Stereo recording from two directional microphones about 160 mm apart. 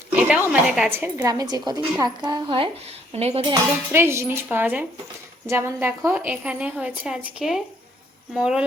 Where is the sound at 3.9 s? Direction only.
15° right (ahead or behind).